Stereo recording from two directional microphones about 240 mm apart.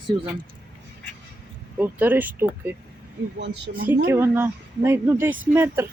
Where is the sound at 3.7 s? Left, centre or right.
Right.